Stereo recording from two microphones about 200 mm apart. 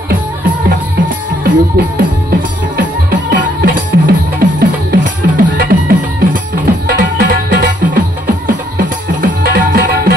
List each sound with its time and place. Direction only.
0.7 s music: 45° right (ahead or behind)
3.1 s music: 45° right (ahead or behind)